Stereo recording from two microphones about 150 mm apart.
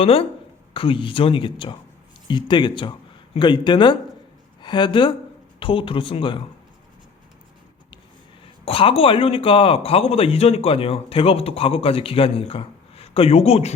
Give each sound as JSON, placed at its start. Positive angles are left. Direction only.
{"t": 0.0, "sound": "a man's voice", "side_deg": 40}
{"t": 8.6, "sound": "a man's voice", "side_deg": 40}